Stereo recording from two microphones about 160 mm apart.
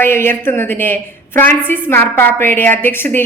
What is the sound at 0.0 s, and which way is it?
A woman's voice, 15° left (ahead or behind).